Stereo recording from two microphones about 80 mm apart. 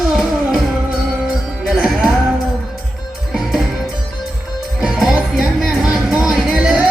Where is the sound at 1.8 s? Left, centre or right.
Centre.